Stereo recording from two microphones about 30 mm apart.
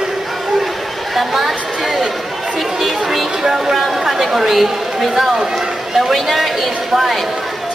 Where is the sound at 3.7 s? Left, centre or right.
Centre.